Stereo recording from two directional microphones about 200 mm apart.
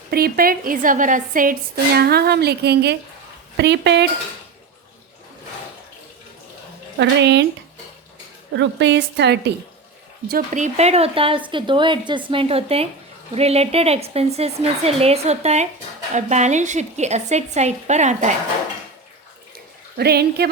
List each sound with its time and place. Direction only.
0.1 s a woman's voice: 50° right (ahead or behind)
7.0 s a woman's voice: 60° right (ahead or behind)
8.5 s a woman's voice: 60° right (ahead or behind)
10.2 s a woman's voice: 40° right (ahead or behind)
19.5 s a sound: 50° right (ahead or behind)